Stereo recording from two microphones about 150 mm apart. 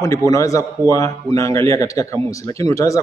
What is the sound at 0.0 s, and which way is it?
A man's voice, 20° left (ahead or behind).